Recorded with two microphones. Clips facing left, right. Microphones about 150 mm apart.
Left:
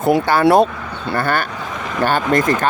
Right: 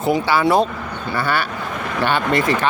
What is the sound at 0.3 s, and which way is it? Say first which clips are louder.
Speech: left 4 dB; 50° left (ahead or behind).